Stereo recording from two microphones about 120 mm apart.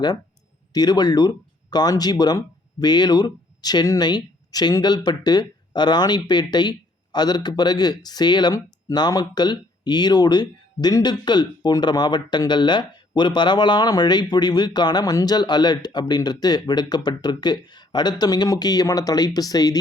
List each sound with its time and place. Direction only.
0.7 s speech: 35° left (ahead or behind)